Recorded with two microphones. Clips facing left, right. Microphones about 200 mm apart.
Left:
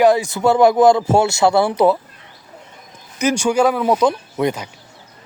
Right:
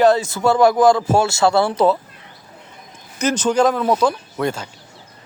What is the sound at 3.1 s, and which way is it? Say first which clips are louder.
Speech: left 1 dB; 10° left (ahead or behind).